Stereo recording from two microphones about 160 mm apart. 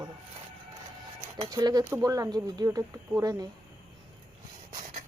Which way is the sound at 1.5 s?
25° right (ahead or behind).